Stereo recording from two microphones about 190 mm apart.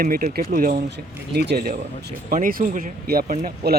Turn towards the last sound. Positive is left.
turn(degrees=-60)  # may be behind; listen again after turning